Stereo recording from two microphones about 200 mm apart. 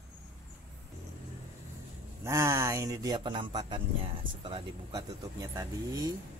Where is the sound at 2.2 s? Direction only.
15° right (ahead or behind).